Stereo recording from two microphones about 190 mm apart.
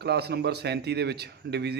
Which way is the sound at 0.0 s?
60° right (ahead or behind).